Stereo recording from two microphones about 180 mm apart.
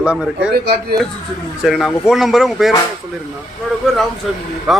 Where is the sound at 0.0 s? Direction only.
5° right (ahead or behind).